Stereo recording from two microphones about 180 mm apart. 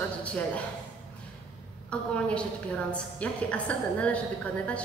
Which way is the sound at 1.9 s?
5° left (ahead or behind).